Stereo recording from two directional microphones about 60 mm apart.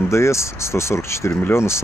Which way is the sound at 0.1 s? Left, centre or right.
Left.